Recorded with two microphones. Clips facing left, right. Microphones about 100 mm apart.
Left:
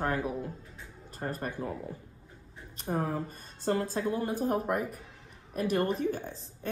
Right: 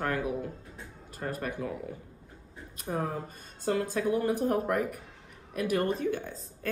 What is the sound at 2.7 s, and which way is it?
Speech, 35° left (ahead or behind).